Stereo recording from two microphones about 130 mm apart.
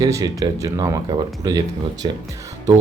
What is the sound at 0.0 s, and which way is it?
Speech, 25° right (ahead or behind).